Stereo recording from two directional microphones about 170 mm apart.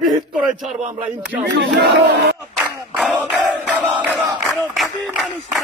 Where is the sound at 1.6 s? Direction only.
90° right.